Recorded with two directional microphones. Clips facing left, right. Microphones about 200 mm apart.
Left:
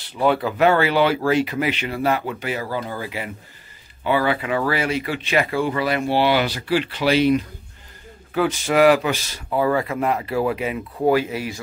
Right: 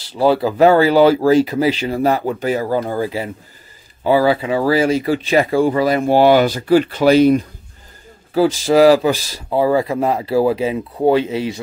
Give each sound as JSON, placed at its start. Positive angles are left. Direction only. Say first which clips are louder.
{"t": 0.1, "sound": "speech", "louder": "right 5 dB", "side_deg": -35}
{"t": 8.4, "sound": "speech", "louder": "right 5 dB", "side_deg": -30}